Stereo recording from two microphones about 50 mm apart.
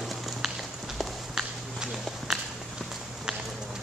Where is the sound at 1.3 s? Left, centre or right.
Centre.